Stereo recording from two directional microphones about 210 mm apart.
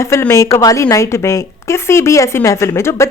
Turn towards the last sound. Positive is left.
turn(degrees=15)  # may be behind; listen again after turning